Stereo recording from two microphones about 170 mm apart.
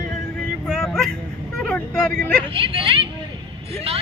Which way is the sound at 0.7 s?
Centre (ahead or behind).